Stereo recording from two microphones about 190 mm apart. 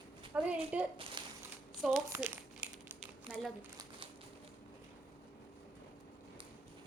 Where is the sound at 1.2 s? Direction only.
25° right (ahead or behind).